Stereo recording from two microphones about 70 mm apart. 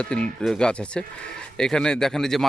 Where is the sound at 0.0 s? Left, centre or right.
Centre.